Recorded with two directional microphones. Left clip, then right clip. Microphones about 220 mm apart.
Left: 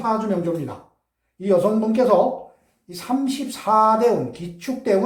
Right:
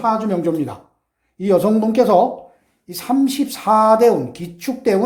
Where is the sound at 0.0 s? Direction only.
50° right (ahead or behind).